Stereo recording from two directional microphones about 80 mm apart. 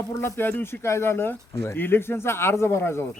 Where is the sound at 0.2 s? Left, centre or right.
Left.